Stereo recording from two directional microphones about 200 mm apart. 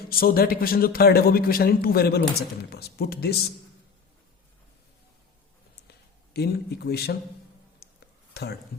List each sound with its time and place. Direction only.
0.1 s a man's voice: 50° left (ahead or behind)
5.9 s speech: 55° left (ahead or behind)
8.3 s a sound: 50° left (ahead or behind)